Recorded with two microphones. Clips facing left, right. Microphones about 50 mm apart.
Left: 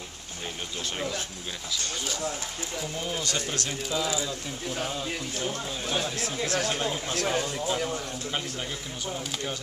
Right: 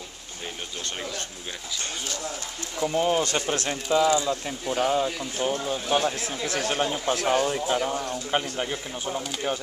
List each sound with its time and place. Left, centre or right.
2.9 s speech: right